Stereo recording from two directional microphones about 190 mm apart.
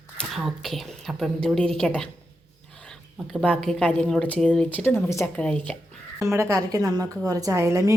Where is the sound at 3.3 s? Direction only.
5° left (ahead or behind).